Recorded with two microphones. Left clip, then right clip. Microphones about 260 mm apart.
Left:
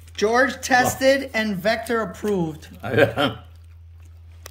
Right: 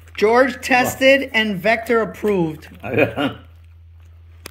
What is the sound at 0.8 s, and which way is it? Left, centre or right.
Speech, left.